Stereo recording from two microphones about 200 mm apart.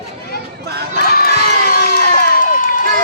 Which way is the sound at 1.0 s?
50° left (ahead or behind).